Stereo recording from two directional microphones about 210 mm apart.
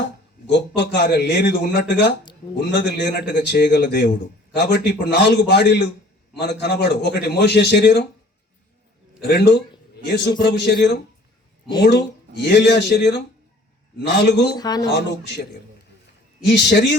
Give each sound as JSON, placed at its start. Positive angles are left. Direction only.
{"t": 0.8, "sound": "a man's voice", "side_deg": 50}
{"t": 9.2, "sound": "a man's voice", "side_deg": 50}
{"t": 14.5, "sound": "speech", "side_deg": 20}
{"t": 16.4, "sound": "a man's voice", "side_deg": 50}